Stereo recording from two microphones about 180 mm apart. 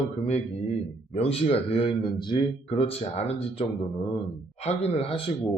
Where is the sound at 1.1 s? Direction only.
35° left (ahead or behind).